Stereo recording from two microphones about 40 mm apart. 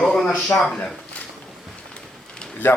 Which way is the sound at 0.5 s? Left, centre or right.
Centre.